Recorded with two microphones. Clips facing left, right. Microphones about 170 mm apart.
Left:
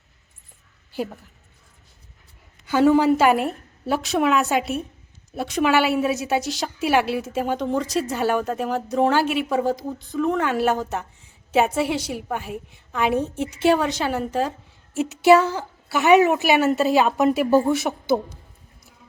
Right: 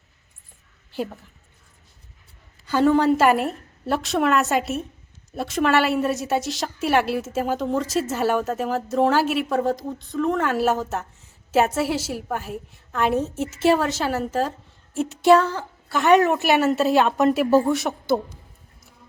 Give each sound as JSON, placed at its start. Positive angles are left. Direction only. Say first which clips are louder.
{"t": 2.6, "sound": "a woman's voice", "louder": "left 1 dB", "side_deg": 10}